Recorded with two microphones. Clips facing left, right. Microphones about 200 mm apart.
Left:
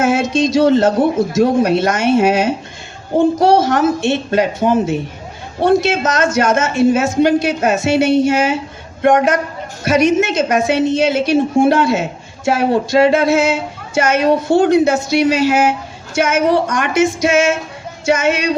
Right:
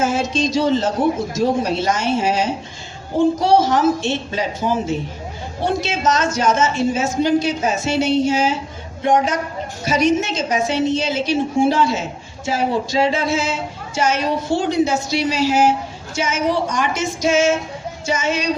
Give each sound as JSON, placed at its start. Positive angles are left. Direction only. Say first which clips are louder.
{"t": 0.2, "sound": "a woman's voice", "louder": "left 5 dB", "side_deg": 50}